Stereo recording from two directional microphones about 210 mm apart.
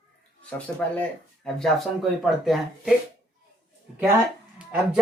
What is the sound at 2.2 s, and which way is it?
Speech, centre (ahead or behind).